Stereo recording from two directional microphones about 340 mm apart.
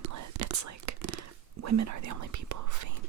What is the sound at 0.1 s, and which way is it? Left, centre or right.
Whispering, right.